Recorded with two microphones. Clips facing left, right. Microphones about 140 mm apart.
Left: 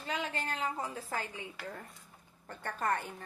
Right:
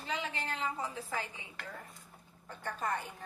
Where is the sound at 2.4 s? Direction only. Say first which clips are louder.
Left 3 dB; 55° left (ahead or behind).